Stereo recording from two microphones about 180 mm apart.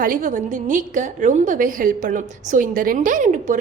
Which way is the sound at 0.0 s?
50° right (ahead or behind).